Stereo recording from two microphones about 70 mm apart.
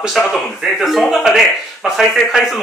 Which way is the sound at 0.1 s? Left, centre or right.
Centre.